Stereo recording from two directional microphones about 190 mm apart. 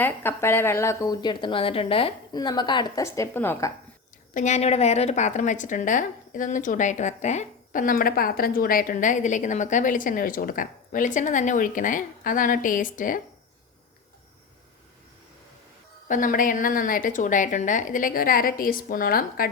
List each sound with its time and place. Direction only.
0.0 s a woman's voice: 10° left (ahead or behind)
4.4 s a woman's voice: 40° left (ahead or behind)
16.0 s a woman's voice: 45° left (ahead or behind)